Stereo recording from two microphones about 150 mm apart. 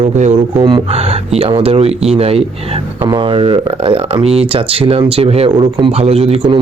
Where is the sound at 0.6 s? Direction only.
35° right (ahead or behind).